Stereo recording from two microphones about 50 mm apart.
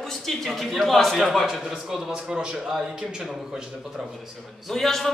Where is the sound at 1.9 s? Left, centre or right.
Centre.